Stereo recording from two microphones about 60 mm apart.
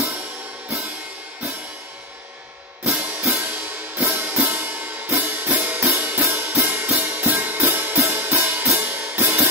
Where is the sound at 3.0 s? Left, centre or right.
Right.